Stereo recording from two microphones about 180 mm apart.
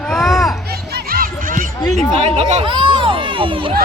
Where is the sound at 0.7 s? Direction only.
55° right (ahead or behind).